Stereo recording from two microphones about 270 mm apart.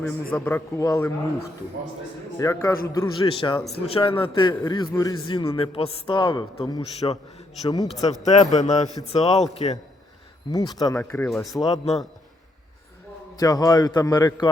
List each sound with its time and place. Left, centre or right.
0.0 s a man's voice: centre
2.4 s a man's voice: centre
8.2 s a man's voice: left
9.0 s a man's voice: centre
11.6 s a man's voice: left
13.3 s a man's voice: centre